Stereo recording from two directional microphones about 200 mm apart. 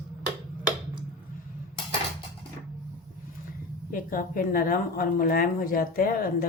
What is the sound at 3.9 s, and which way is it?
Speech, 45° left (ahead or behind).